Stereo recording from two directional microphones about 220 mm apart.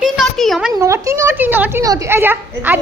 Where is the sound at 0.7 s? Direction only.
15° right (ahead or behind).